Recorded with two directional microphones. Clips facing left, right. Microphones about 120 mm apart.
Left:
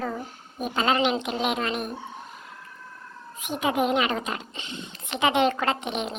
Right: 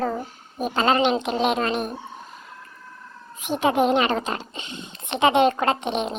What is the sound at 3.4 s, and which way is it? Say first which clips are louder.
A woman's voice: right 5 dB; 35° right (ahead or behind).